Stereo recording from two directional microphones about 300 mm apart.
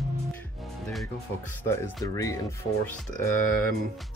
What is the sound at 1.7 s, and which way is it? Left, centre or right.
Speech, centre.